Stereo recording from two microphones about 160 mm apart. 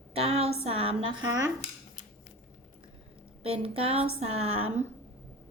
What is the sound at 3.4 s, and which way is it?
A woman's voice, 35° right (ahead or behind).